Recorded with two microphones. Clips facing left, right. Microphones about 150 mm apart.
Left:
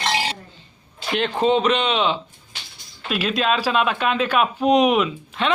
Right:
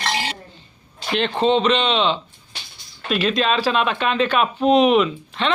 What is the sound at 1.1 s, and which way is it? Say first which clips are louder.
Speech: right 1 dB; 10° left (ahead or behind).